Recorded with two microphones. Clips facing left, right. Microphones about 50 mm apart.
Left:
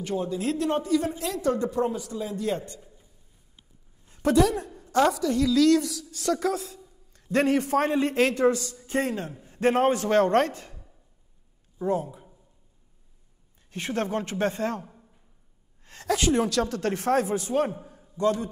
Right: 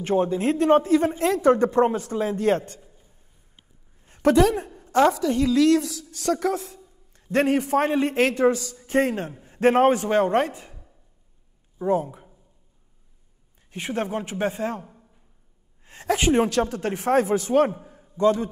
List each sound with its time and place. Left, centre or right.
0.0 s speech: right
4.2 s a woman's voice: right
4.6 s a woman's voice: right
5.1 s a man's voice: right; by 10.9 s centre
11.9 s speech: right
13.7 s speech: centre
15.8 s a sound: centre
16.1 s speech: right
17.1 s a man's voice: right